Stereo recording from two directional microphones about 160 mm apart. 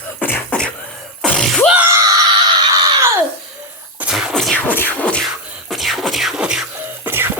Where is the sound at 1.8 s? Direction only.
20° right (ahead or behind).